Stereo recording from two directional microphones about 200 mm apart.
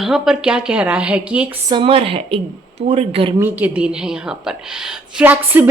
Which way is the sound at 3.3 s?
10° right (ahead or behind).